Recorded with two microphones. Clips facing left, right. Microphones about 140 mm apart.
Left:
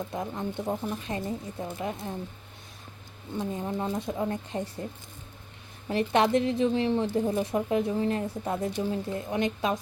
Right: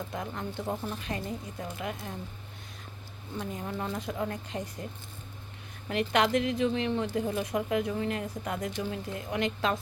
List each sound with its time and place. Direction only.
0.1 s speech: 25° left (ahead or behind)
3.3 s speech: 25° left (ahead or behind)
5.9 s speech: 25° left (ahead or behind)